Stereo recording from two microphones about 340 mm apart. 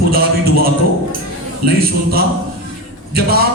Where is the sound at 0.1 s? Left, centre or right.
Right.